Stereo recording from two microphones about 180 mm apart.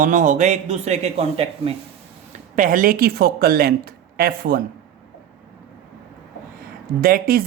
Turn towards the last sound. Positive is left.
turn(degrees=-55)  # may be behind; listen again after turning